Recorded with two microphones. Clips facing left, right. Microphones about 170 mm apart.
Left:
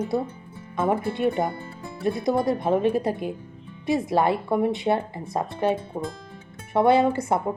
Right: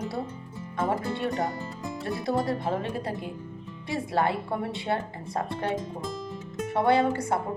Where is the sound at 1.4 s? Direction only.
20° left (ahead or behind).